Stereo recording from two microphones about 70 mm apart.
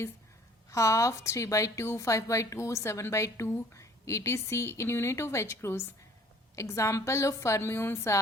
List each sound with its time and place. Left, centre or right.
0.7 s a woman's voice: left